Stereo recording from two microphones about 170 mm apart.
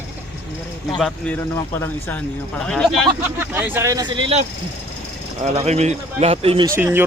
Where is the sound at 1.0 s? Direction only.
5° left (ahead or behind).